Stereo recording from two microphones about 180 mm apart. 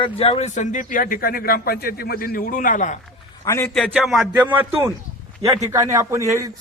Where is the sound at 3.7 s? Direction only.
Centre (ahead or behind); by 6.5 s 15° right (ahead or behind).